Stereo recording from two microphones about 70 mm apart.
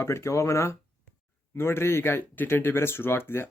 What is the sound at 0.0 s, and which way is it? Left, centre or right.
Speech, left.